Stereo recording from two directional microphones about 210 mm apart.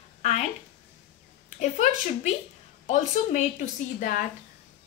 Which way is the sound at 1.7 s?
35° left (ahead or behind).